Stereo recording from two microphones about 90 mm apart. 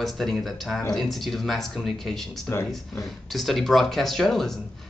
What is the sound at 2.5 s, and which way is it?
Speech, 25° left (ahead or behind).